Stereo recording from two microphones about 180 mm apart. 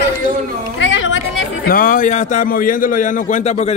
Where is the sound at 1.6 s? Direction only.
50° left (ahead or behind).